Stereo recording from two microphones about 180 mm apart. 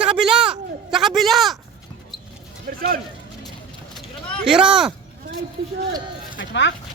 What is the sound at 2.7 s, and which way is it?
Speech, 55° right (ahead or behind).